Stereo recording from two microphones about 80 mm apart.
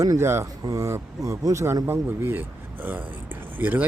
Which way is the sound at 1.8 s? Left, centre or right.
Right.